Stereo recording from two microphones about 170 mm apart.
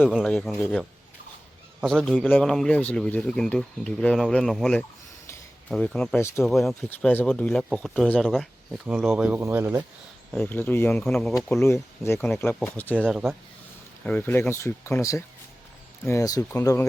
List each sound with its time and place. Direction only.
0.1 s speech: 5° left (ahead or behind)
5.3 s a sound: 10° left (ahead or behind)
6.1 s speech: 15° left (ahead or behind)
6.4 s speech: centre (ahead or behind)
6.8 s speech: 10° left (ahead or behind); by 9.8 s 10° right (ahead or behind)
10.3 s speech: 10° left (ahead or behind)
11.6 s speech: 15° left (ahead or behind)